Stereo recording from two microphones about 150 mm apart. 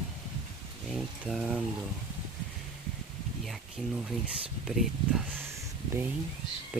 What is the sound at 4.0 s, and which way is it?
Speech, 5° right (ahead or behind).